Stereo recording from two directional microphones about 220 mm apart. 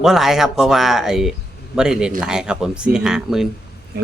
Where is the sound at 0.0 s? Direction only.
Centre (ahead or behind).